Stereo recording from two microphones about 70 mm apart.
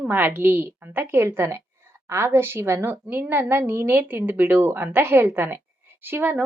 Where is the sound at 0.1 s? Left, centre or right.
Right.